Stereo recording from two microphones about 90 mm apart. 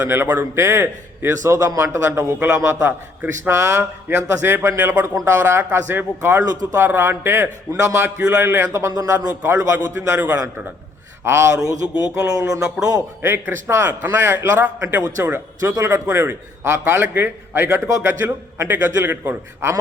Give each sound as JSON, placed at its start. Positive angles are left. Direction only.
{"t": 0.1, "sound": "a man's voice", "side_deg": -30}
{"t": 5.0, "sound": "a man's voice", "side_deg": -30}
{"t": 6.4, "sound": "speech", "side_deg": -45}
{"t": 6.7, "sound": "a man's voice", "side_deg": -30}
{"t": 8.9, "sound": "a man's voice", "side_deg": -45}
{"t": 13.2, "sound": "a man's voice", "side_deg": -25}